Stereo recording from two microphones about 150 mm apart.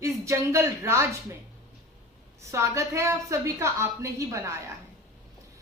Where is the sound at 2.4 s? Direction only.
20° right (ahead or behind).